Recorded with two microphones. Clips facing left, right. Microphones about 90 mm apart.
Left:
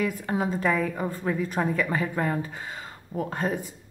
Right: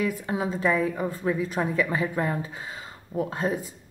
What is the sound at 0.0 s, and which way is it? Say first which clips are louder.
A woman's voice: even; 40° left (ahead or behind).